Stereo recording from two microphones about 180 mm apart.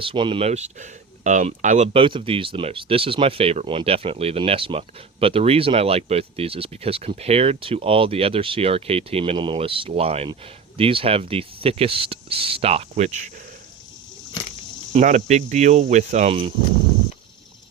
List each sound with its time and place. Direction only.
0.0 s speech: 30° right (ahead or behind)
14.9 s speech: 40° right (ahead or behind)